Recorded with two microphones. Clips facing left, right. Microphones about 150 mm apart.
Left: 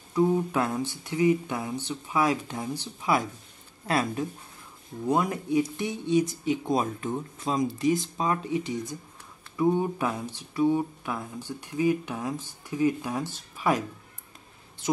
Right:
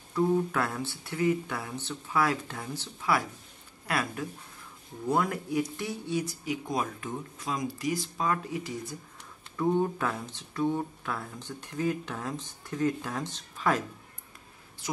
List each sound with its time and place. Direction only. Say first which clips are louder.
0.1 s speech: left 2 dB; 15° left (ahead or behind)